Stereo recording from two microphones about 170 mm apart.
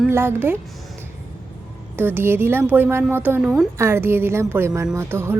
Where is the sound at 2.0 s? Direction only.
10° right (ahead or behind).